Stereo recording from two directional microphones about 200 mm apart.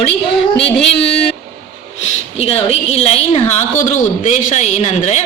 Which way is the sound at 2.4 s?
30° left (ahead or behind).